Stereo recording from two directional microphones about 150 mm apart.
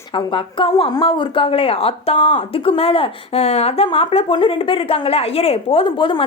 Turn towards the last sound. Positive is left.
turn(degrees=35)  # may be behind; listen again after turning